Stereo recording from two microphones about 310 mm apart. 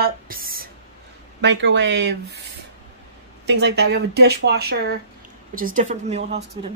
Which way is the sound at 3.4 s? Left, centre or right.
Right.